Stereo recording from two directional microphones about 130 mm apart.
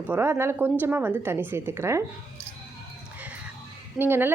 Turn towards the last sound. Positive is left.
turn(degrees=-15)  # may be behind; listen again after turning